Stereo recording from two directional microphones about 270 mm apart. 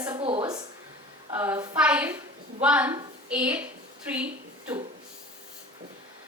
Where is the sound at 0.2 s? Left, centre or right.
Right.